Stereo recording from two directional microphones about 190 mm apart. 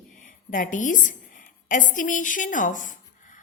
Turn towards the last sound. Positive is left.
turn(degrees=40)  # may be behind; listen again after turning